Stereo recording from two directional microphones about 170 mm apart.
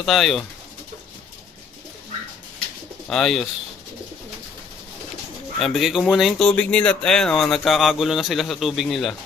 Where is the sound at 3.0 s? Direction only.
Centre (ahead or behind).